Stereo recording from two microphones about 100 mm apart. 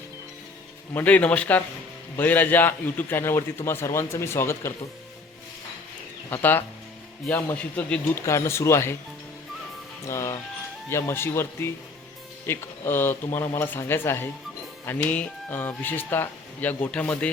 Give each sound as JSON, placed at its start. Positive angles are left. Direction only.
{"t": 0.9, "sound": "a man's voice", "side_deg": 15}
{"t": 6.3, "sound": "a man's voice", "side_deg": 20}
{"t": 8.1, "sound": "a man's voice", "side_deg": 30}
{"t": 10.1, "sound": "a man's voice", "side_deg": 30}